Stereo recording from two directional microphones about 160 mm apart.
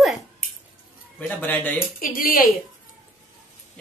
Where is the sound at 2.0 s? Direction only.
60° left (ahead or behind).